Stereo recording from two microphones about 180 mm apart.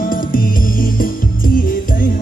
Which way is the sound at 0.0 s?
50° left (ahead or behind).